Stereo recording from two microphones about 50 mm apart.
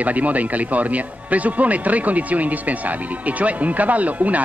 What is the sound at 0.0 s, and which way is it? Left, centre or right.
A man's voice, right.